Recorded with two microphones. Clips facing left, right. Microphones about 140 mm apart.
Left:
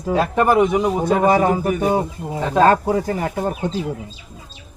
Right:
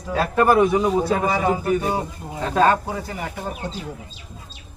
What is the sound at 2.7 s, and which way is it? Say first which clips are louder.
Speech: left 6 dB; 45° left (ahead or behind).